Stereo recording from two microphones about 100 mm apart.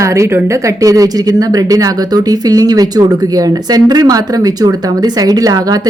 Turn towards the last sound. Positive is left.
turn(degrees=-40)  # may be behind; listen again after turning